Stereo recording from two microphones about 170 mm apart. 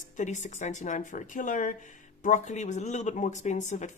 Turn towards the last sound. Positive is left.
turn(degrees=45)  # may be behind; listen again after turning